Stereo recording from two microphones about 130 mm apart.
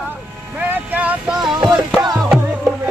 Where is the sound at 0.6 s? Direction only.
10° right (ahead or behind).